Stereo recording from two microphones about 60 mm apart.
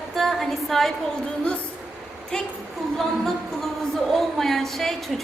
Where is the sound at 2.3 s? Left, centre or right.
Centre.